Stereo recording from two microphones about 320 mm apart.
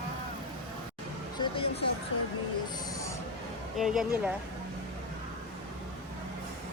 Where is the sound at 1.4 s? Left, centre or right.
Centre.